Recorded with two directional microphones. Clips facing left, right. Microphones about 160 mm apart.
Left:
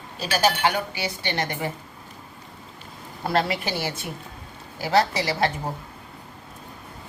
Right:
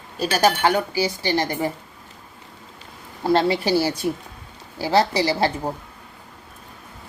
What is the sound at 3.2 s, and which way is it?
A woman's voice, 25° right (ahead or behind).